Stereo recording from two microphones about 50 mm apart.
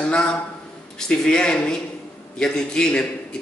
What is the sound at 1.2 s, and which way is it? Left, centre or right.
A man's voice, centre.